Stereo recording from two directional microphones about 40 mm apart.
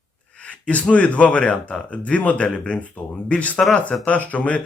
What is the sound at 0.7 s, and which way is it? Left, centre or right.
Speech, left.